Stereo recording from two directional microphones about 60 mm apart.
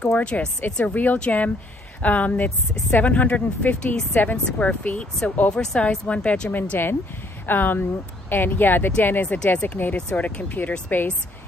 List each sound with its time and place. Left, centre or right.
0.2 s speech: centre
4.2 s speech: left
6.5 s speech: left